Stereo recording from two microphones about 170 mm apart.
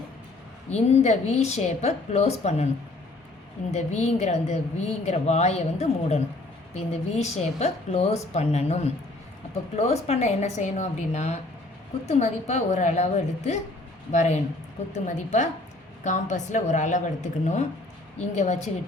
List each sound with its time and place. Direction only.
0.7 s a woman's voice: 40° left (ahead or behind)
3.7 s a woman's voice: 40° left (ahead or behind)